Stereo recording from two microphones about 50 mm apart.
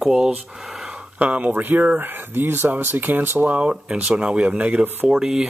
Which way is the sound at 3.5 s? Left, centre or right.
Right.